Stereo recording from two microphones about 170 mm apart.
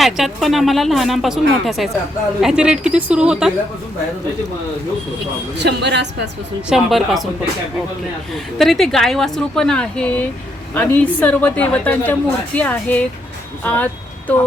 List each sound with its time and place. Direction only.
0.0 s speech: centre (ahead or behind)
5.5 s a woman's voice: 90° right
6.7 s speech: centre (ahead or behind)
8.5 s a woman's voice: centre (ahead or behind)